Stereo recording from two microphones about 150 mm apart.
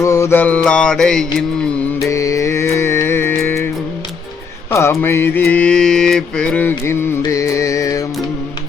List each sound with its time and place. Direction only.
0.0 s music: 20° left (ahead or behind); by 1.5 s 5° left (ahead or behind)
2.0 s music: 20° left (ahead or behind)
4.7 s music: 20° left (ahead or behind)